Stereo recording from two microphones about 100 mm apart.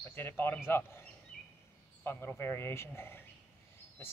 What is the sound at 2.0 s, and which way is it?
Speech, 20° left (ahead or behind).